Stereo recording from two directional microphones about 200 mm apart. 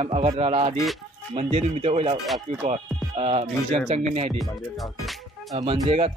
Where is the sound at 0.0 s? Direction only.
30° right (ahead or behind).